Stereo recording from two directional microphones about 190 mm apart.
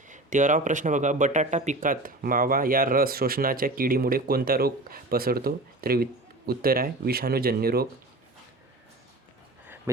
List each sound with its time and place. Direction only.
0.1 s a man's voice: 40° right (ahead or behind)